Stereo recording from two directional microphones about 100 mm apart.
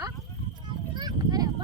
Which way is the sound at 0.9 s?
45° right (ahead or behind).